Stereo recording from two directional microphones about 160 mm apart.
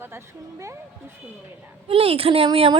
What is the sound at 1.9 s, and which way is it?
Speech, 35° right (ahead or behind).